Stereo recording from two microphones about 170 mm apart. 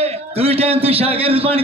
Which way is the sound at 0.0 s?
35° right (ahead or behind).